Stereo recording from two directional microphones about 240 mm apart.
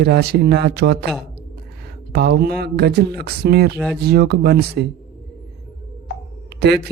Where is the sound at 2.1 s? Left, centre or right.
Right.